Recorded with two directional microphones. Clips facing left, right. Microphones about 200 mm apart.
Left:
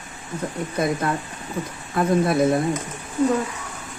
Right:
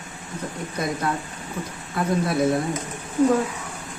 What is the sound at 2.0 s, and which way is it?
Speech, 50° left (ahead or behind).